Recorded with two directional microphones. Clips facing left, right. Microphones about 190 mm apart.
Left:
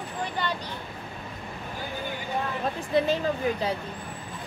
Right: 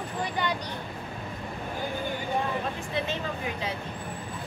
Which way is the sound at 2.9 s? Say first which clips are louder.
Left 9 dB; 35° left (ahead or behind).